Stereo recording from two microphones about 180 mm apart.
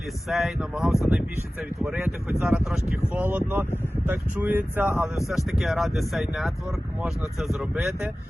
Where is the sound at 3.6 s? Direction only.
10° left (ahead or behind).